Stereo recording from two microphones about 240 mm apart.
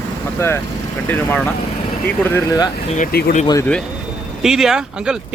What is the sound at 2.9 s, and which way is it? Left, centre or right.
Speech, left.